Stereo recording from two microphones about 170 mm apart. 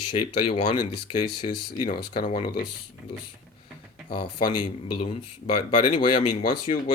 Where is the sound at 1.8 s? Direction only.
65° left (ahead or behind).